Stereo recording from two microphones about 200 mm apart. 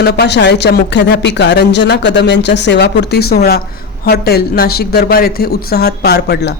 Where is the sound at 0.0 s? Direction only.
55° left (ahead or behind).